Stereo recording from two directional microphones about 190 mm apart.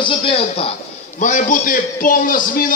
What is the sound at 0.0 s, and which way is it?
Speech, 30° left (ahead or behind).